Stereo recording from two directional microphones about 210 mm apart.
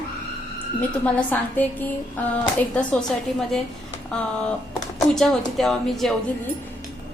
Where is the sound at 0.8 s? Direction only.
5° left (ahead or behind).